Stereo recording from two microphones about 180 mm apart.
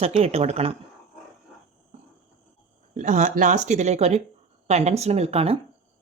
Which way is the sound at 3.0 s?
45° right (ahead or behind).